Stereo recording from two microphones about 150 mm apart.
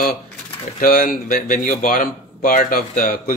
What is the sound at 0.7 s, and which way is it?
Speech, 70° left (ahead or behind).